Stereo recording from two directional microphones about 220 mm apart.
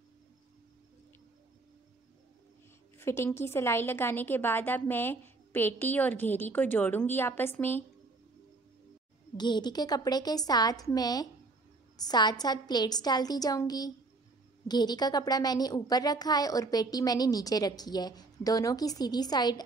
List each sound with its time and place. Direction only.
3.0 s a woman's voice: 10° left (ahead or behind)
9.4 s a woman's voice: 20° left (ahead or behind)